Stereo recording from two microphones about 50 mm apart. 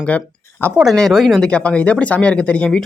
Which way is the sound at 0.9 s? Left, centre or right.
Centre.